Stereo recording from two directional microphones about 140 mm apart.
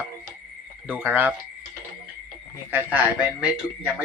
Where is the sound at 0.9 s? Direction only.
15° right (ahead or behind).